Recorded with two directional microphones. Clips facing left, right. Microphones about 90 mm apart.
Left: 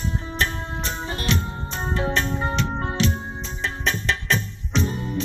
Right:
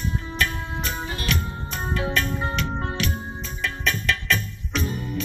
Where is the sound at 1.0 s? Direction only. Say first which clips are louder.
Left 2 dB; 30° left (ahead or behind).